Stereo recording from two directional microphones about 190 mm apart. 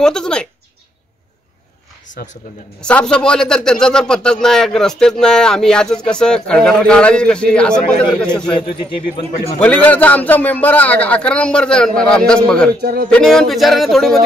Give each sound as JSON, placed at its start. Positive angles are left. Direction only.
{"t": 0.0, "sound": "a man's voice", "side_deg": 5}
{"t": 2.8, "sound": "a man's voice", "side_deg": 5}
{"t": 9.6, "sound": "a man's voice", "side_deg": 10}
{"t": 12.8, "sound": "speech", "side_deg": -55}
{"t": 13.1, "sound": "a man's voice", "side_deg": 5}